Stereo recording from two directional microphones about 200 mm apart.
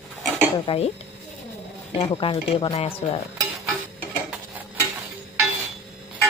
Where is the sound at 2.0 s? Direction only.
25° left (ahead or behind).